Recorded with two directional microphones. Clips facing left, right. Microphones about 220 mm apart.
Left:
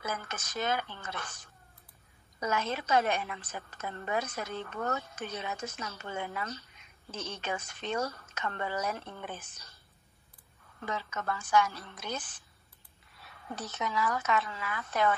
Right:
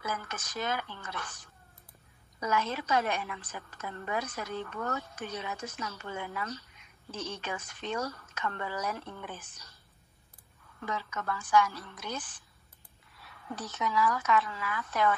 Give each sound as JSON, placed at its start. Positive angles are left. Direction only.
{"t": 0.0, "sound": "a woman's voice", "side_deg": 25}
{"t": 10.8, "sound": "a woman's voice", "side_deg": 25}